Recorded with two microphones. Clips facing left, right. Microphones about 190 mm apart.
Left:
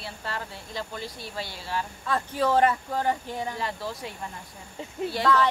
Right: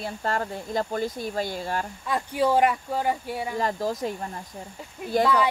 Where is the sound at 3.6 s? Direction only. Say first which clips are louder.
Right 7 dB; 45° right (ahead or behind).